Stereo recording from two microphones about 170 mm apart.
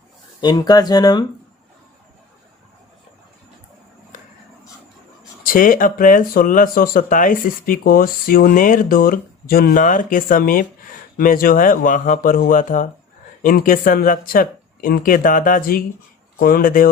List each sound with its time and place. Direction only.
0.4 s speech: 25° left (ahead or behind)
4.1 s a sound: 50° left (ahead or behind)
5.4 s speech: 55° left (ahead or behind)